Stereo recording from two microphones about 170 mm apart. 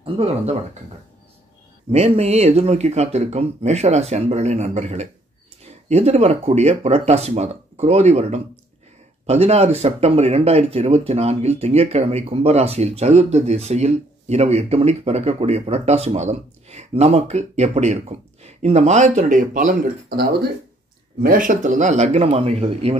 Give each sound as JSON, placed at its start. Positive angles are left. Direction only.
{"t": 0.0, "sound": "speech", "side_deg": -35}
{"t": 1.9, "sound": "speech", "side_deg": -40}
{"t": 21.2, "sound": "speech", "side_deg": -55}